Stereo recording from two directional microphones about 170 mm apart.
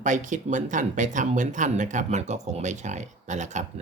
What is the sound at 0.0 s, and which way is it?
Speech, 45° right (ahead or behind).